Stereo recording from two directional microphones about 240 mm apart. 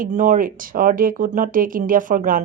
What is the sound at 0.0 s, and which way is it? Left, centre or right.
Speech, right.